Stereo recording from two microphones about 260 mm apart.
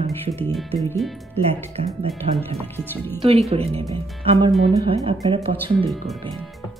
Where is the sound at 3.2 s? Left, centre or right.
Right.